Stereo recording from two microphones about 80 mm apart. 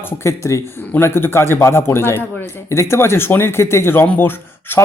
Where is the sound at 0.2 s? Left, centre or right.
Left.